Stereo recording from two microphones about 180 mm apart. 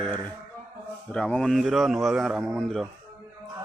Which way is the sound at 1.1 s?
5° left (ahead or behind).